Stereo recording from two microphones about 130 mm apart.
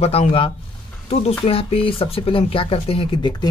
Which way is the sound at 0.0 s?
50° left (ahead or behind).